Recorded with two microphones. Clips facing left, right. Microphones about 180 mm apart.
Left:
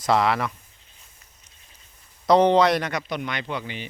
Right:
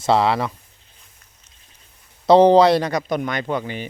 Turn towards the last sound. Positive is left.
turn(degrees=-45)  # may be behind; listen again after turning